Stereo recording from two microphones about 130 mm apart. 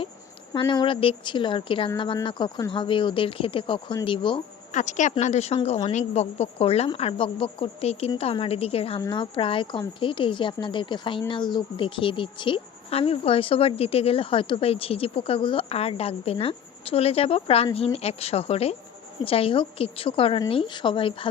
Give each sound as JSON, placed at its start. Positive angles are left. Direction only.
{"t": 0.7, "sound": "speech", "side_deg": 40}
{"t": 4.7, "sound": "a woman's voice", "side_deg": 70}
{"t": 9.0, "sound": "speech", "side_deg": 35}